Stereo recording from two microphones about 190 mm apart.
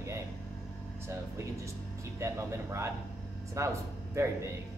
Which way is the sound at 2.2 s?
15° right (ahead or behind).